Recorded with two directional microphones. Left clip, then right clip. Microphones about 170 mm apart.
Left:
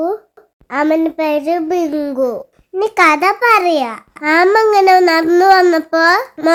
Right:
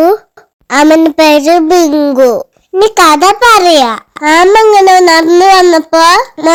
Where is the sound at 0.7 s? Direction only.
30° right (ahead or behind).